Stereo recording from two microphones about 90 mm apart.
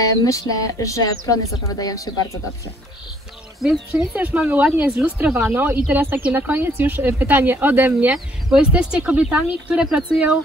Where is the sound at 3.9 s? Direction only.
15° right (ahead or behind).